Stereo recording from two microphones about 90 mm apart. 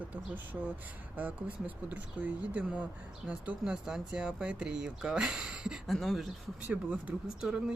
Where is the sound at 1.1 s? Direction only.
15° right (ahead or behind).